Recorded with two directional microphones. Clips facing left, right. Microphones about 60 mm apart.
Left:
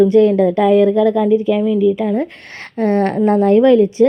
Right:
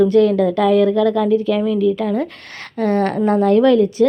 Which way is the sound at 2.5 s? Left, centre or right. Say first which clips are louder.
Left 2 dB; left.